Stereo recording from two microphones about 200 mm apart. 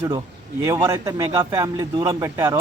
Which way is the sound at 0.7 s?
15° right (ahead or behind).